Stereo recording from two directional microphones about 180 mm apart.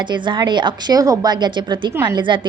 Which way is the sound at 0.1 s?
25° right (ahead or behind).